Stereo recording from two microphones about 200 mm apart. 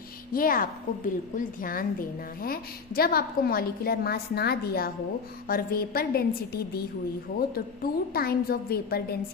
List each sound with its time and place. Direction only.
0.3 s a woman's voice: 45° left (ahead or behind)